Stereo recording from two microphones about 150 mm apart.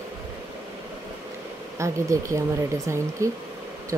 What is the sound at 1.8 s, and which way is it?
Speech, 20° right (ahead or behind).